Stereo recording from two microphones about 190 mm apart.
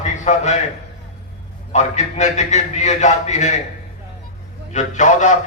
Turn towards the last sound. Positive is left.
turn(degrees=40)  # may be behind; listen again after turning